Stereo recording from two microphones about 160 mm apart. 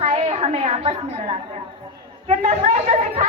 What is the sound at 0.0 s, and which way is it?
A woman's voice, 40° right (ahead or behind).